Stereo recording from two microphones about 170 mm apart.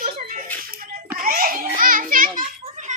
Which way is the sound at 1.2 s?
55° right (ahead or behind).